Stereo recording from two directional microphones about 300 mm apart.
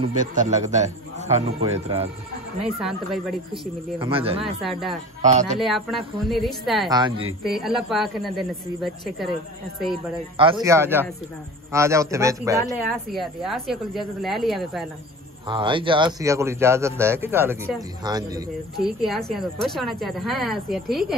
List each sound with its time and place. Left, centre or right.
0.0 s speech: right
2.6 s a woman's voice: centre
4.0 s speech: centre
4.6 s a woman's voice: centre
5.2 s speech: right
5.6 s a woman's voice: centre
6.9 s a man's voice: centre
7.4 s a woman's voice: centre
10.3 s a man's voice: centre
13.1 s a woman's voice: centre
15.4 s a man's voice: centre
18.8 s a woman's voice: centre